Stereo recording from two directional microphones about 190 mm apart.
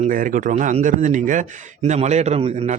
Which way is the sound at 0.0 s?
45° right (ahead or behind).